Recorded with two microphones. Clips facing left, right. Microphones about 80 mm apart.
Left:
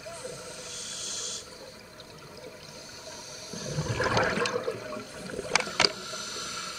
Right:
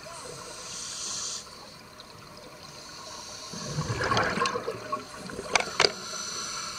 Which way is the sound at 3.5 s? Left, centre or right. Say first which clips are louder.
Left 1 dB; centre.